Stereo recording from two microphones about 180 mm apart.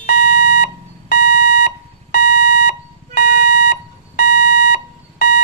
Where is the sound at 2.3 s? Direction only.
65° left (ahead or behind).